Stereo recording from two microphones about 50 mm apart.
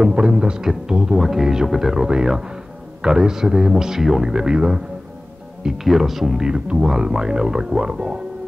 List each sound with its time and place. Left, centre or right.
0.0 s speech: centre